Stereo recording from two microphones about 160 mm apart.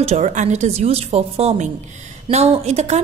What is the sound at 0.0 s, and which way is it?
A woman's voice, 45° right (ahead or behind).